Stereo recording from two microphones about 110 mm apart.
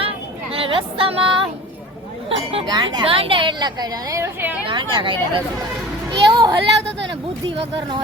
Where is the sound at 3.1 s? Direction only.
55° right (ahead or behind).